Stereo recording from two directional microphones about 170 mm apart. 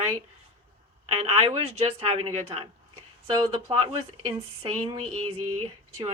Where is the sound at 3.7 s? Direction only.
30° right (ahead or behind).